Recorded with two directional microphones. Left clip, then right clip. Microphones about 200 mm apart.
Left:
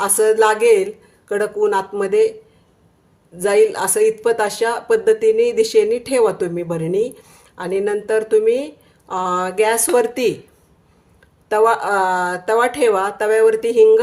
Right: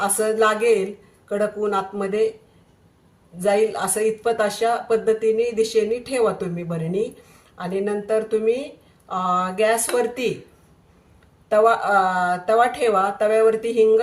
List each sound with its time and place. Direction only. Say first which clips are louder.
0.0 s speech: left 5 dB; 55° left (ahead or behind)
3.3 s speech: left 5 dB; 55° left (ahead or behind)
11.4 s speech: left 2 dB; 55° left (ahead or behind)